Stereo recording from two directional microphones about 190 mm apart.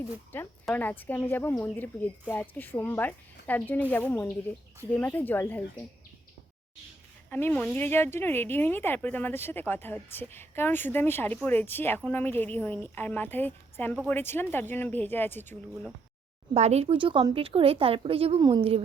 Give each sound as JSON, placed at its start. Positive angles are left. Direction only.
{"t": 0.3, "sound": "a woman's voice", "side_deg": 10}
{"t": 7.3, "sound": "a woman's voice", "side_deg": 10}
{"t": 16.6, "sound": "a woman's voice", "side_deg": -35}